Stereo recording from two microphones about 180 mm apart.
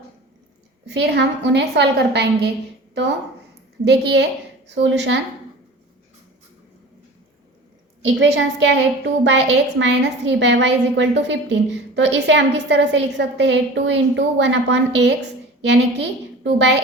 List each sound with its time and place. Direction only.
0.9 s a woman's voice: 70° right (ahead or behind)
3.8 s a woman's voice: 70° right (ahead or behind)
4.7 s a woman's voice: 85° right
8.0 s a woman's voice: 90° right